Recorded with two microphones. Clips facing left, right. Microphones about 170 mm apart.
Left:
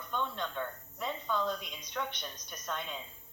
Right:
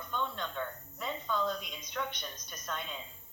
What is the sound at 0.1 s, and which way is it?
Cricket, 15° left (ahead or behind).